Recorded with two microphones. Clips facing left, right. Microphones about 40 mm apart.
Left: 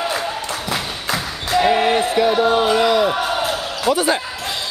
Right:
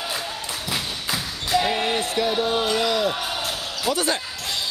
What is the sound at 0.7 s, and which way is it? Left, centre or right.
Basketball bounce, centre.